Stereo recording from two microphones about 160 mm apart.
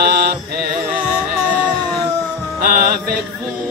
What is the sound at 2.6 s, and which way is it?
Music, 65° right (ahead or behind).